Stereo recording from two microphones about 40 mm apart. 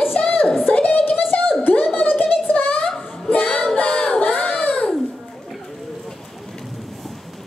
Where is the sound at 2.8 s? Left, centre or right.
Centre.